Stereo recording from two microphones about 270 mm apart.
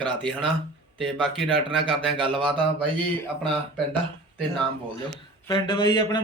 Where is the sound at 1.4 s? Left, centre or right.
Centre.